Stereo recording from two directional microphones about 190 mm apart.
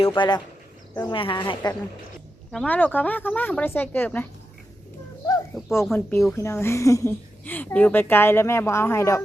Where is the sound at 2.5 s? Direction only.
5° left (ahead or behind).